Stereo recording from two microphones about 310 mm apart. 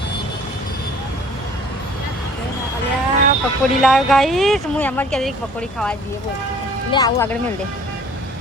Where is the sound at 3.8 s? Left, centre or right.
Centre.